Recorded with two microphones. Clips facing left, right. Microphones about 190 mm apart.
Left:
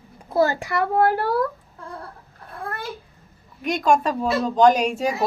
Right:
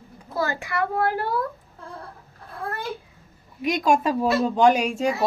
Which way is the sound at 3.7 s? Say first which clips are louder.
Left 1 dB; 5° right (ahead or behind).